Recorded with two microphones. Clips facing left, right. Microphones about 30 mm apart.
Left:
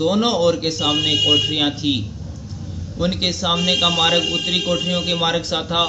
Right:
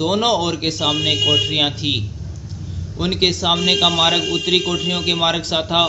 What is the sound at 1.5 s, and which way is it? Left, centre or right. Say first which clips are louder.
Speech: even; right.